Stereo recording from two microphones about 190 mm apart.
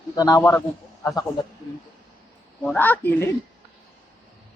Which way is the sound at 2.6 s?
10° left (ahead or behind).